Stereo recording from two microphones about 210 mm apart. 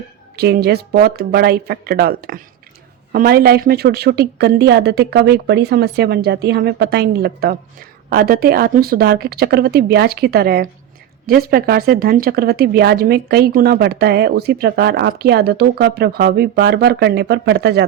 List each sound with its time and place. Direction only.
0.3 s speech: 50° right (ahead or behind)